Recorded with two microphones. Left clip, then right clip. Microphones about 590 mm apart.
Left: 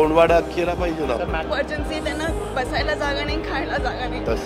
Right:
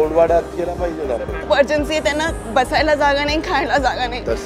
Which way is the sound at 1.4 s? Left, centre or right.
Right.